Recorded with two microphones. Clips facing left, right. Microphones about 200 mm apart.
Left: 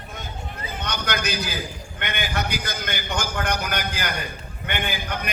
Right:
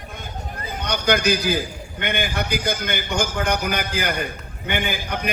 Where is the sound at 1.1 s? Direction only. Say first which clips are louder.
Right 10 dB; 55° right (ahead or behind).